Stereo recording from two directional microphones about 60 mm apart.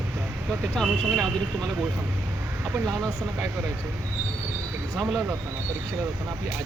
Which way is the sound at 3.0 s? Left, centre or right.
Right.